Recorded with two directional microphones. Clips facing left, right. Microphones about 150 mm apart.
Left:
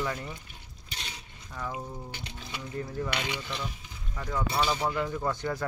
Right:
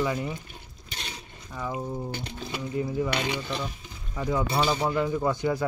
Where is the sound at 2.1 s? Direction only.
40° right (ahead or behind).